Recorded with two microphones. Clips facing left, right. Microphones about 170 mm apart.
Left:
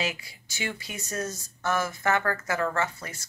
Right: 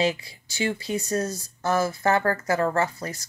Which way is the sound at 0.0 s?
35° right (ahead or behind).